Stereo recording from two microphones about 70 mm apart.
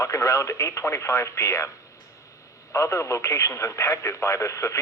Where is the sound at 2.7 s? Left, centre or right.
Left.